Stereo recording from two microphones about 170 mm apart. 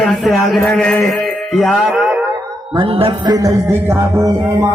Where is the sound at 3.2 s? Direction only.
20° right (ahead or behind).